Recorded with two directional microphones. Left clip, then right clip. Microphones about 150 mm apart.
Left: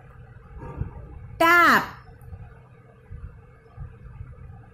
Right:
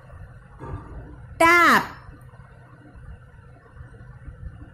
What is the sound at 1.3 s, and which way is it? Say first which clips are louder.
Speech: right 1 dB; 5° right (ahead or behind).